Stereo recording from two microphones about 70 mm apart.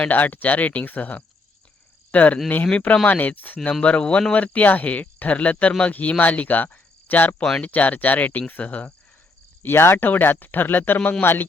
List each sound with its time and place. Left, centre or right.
0.0 s speech: left
9.6 s speech: left